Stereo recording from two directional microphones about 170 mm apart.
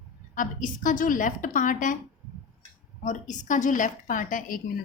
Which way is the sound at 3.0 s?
45° left (ahead or behind).